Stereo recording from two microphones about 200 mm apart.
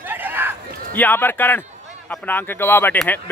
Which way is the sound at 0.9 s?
10° left (ahead or behind).